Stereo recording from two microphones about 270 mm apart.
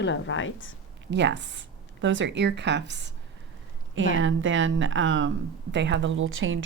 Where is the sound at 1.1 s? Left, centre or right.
Right.